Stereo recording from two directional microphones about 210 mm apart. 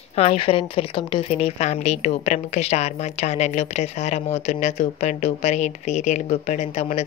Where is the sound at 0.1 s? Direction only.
30° left (ahead or behind).